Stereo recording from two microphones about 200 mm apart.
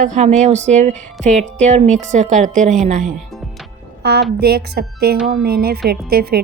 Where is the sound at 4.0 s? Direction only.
55° right (ahead or behind).